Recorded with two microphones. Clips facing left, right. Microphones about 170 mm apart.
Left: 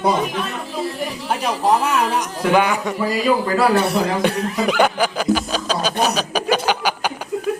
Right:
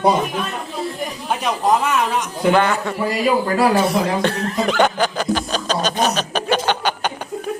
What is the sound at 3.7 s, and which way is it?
Speech, 65° left (ahead or behind).